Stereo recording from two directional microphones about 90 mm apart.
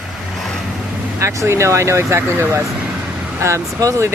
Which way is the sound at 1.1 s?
30° right (ahead or behind).